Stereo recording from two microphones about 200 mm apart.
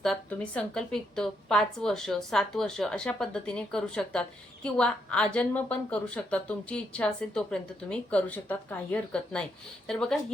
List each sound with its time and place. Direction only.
0.0 s a woman's voice: 5° left (ahead or behind)